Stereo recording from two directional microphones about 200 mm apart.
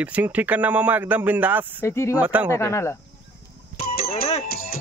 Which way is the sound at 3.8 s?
50° left (ahead or behind).